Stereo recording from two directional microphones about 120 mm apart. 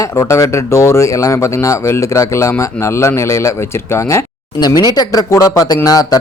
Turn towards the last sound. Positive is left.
turn(degrees=30)  # may be behind; listen again after turning